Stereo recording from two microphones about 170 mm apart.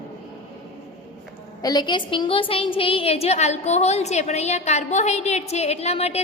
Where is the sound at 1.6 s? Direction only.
25° left (ahead or behind).